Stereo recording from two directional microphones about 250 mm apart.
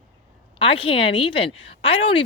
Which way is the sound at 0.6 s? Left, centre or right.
Left.